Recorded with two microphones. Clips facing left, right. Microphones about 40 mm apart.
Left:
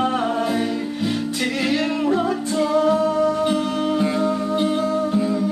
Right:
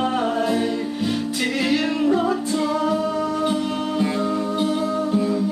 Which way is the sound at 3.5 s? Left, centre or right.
Centre.